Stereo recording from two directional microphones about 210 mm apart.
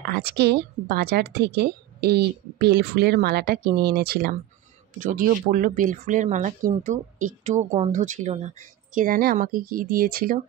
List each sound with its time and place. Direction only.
0.1 s a woman's voice: 50° right (ahead or behind)